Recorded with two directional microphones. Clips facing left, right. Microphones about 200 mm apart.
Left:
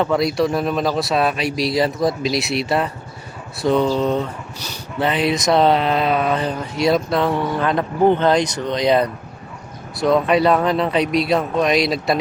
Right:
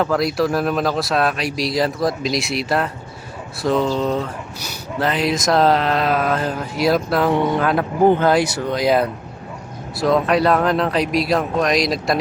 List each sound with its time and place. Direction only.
0.0 s speech: centre (ahead or behind)
7.3 s speech: 20° right (ahead or behind)
7.6 s speech: 5° right (ahead or behind)